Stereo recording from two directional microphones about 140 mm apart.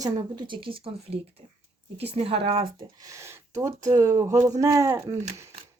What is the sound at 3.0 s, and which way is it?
Speech, 20° right (ahead or behind).